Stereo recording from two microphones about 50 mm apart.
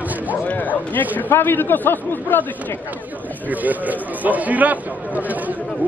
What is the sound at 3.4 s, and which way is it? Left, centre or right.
Speech, right.